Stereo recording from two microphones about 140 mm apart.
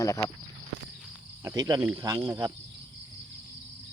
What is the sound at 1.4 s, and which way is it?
Cricket, 25° right (ahead or behind).